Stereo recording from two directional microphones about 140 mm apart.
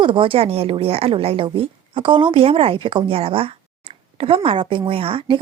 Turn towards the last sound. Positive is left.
turn(degrees=-40)  # may be behind; listen again after turning